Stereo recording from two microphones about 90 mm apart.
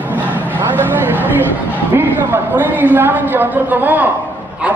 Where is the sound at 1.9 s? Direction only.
25° right (ahead or behind).